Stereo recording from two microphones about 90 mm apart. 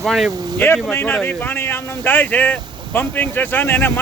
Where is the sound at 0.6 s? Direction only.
20° left (ahead or behind).